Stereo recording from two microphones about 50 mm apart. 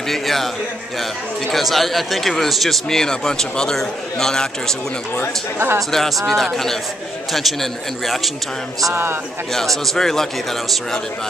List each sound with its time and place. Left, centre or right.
0.1 s a man's voice: centre
1.5 s a man's voice: centre
5.9 s a man's voice: centre
8.9 s speech: right
9.8 s speech: centre